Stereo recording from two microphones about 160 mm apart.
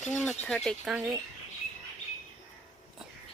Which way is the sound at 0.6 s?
Centre (ahead or behind).